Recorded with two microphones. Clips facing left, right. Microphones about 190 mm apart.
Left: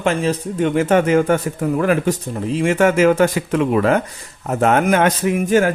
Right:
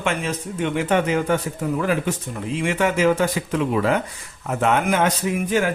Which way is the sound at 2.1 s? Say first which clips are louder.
Left 6 dB; 40° left (ahead or behind).